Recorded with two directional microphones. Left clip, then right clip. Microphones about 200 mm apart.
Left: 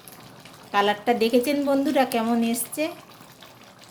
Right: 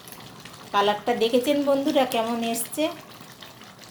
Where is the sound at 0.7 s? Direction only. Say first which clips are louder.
Left 1 dB; 35° left (ahead or behind).